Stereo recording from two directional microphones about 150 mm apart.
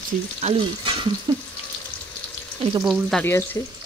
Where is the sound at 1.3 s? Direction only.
30° right (ahead or behind).